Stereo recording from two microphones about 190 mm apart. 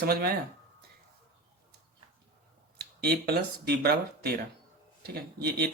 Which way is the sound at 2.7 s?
55° right (ahead or behind).